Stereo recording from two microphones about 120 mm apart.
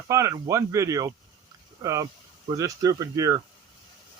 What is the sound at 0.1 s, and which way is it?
Speech, 25° right (ahead or behind).